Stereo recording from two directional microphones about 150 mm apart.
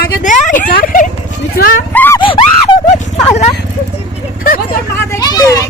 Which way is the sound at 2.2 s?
35° left (ahead or behind).